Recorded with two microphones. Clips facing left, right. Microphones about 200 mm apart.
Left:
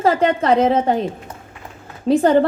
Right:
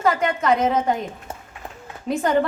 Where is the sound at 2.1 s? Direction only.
30° left (ahead or behind).